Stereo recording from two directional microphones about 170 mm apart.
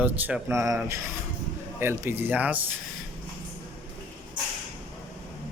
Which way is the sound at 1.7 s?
15° right (ahead or behind).